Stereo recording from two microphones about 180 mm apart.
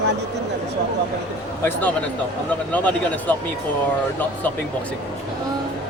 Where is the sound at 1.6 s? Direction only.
10° left (ahead or behind).